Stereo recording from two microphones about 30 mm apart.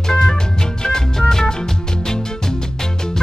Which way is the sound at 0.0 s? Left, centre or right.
Centre.